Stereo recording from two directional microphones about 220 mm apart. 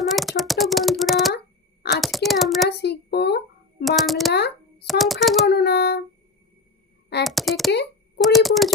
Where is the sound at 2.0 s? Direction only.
Centre (ahead or behind).